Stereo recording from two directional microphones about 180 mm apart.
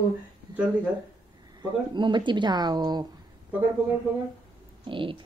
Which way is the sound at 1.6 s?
25° right (ahead or behind).